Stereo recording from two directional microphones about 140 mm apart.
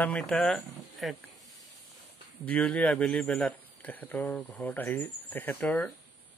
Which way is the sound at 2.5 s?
10° left (ahead or behind).